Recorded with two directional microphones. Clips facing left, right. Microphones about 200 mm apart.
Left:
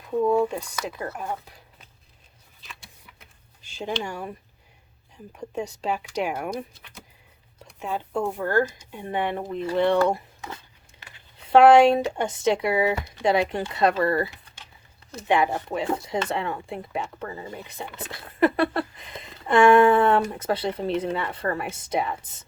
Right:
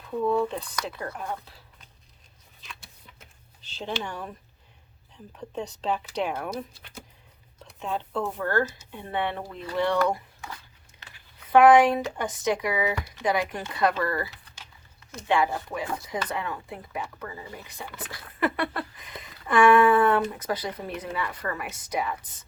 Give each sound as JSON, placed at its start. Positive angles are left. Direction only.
{"t": 0.2, "sound": "speech", "side_deg": 15}
{"t": 2.6, "sound": "a sound", "side_deg": 0}
{"t": 3.6, "sound": "a sound", "side_deg": 10}
{"t": 4.0, "sound": "speech", "side_deg": 10}
{"t": 5.4, "sound": "speech", "side_deg": 10}
{"t": 7.6, "sound": "speech", "side_deg": 10}
{"t": 10.9, "sound": "a sound", "side_deg": 25}
{"t": 11.4, "sound": "speech", "side_deg": 25}
{"t": 15.3, "sound": "speech", "side_deg": 20}